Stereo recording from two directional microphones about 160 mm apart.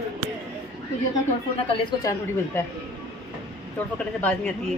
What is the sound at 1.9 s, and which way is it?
Speech, 20° left (ahead or behind).